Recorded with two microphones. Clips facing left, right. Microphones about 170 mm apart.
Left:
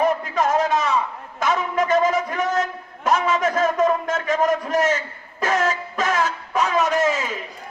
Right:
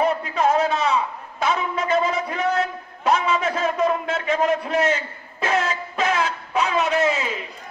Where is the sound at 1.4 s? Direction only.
45° left (ahead or behind).